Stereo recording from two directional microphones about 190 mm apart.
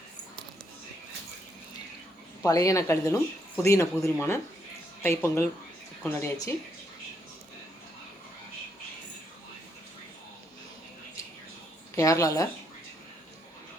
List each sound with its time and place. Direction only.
2.4 s speech: 20° left (ahead or behind)
11.9 s speech: 15° left (ahead or behind)